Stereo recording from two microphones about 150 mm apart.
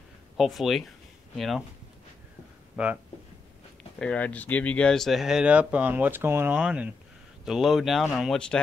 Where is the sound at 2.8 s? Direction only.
5° right (ahead or behind).